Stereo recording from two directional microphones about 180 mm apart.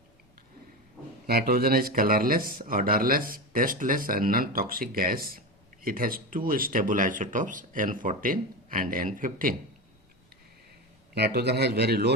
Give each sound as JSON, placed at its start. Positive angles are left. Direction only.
{"t": 1.3, "sound": "speech", "side_deg": -60}
{"t": 11.1, "sound": "a man's voice", "side_deg": -65}